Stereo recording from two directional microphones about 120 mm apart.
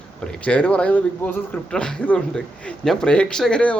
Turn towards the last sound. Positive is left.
turn(degrees=10)  # may be behind; listen again after turning